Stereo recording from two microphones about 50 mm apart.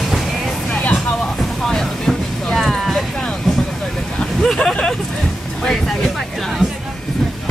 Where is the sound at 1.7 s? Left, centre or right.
Centre.